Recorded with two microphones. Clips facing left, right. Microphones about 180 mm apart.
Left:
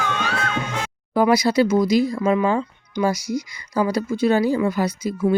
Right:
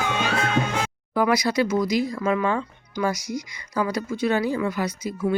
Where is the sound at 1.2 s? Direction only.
30° left (ahead or behind).